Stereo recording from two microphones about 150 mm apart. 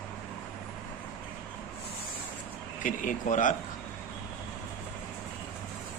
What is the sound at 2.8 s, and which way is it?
Speech, 60° left (ahead or behind).